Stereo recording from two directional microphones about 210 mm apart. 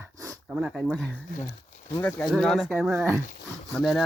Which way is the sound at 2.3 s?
Centre (ahead or behind).